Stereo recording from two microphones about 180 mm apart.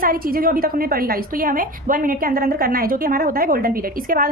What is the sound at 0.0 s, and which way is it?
A woman's voice, 55° right (ahead or behind).